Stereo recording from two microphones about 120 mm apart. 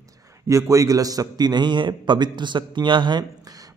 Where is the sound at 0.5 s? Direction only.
25° right (ahead or behind).